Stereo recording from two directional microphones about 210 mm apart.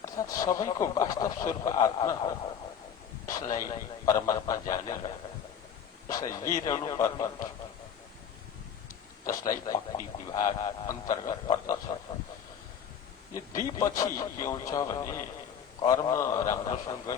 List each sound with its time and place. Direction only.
0.0 s speech: 15° left (ahead or behind)
9.2 s speech: 15° left (ahead or behind)
13.3 s speech: 15° left (ahead or behind)